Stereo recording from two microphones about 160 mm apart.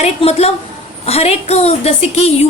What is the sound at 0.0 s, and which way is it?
A woman's voice, 40° left (ahead or behind).